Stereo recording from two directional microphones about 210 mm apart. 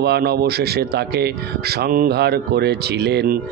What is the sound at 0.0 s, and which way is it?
Speech, 50° right (ahead or behind).